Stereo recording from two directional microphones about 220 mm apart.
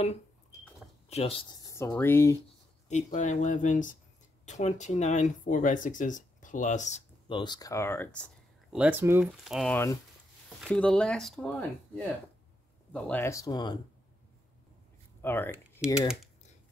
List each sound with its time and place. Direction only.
0.0 s cash register: 30° left (ahead or behind)
1.0 s speech: 30° left (ahead or behind); by 2.3 s 10° left (ahead or behind)
2.9 s speech: 35° left (ahead or behind)
7.3 s speech: 20° left (ahead or behind)
8.7 s speech: 5° right (ahead or behind); by 13.7 s 20° left (ahead or behind)
15.2 s speech: 10° left (ahead or behind)